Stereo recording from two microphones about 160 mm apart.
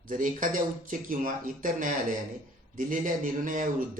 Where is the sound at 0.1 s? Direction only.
55° right (ahead or behind).